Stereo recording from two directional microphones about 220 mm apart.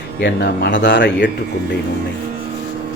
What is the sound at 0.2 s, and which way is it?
Speech, 50° left (ahead or behind).